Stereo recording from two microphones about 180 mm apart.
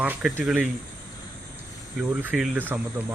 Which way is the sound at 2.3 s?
5° right (ahead or behind).